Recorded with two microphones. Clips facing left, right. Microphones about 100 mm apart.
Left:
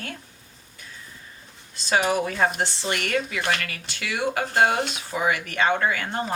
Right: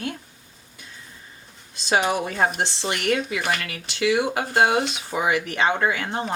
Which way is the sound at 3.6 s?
20° right (ahead or behind).